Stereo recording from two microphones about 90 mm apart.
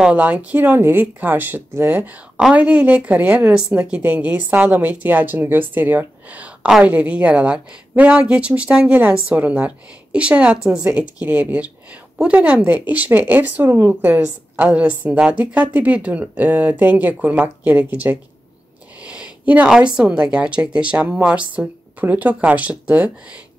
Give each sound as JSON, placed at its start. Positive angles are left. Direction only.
{"t": 0.0, "sound": "speech", "side_deg": -15}